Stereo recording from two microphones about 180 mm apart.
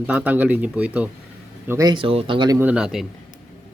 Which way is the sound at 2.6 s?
5° right (ahead or behind).